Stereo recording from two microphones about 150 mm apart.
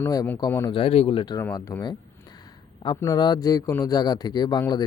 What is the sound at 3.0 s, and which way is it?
Speech, 25° left (ahead or behind).